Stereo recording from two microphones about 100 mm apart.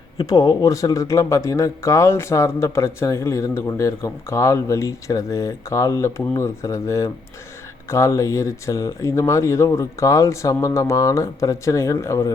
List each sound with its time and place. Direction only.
0.2 s a man's voice: 40° left (ahead or behind)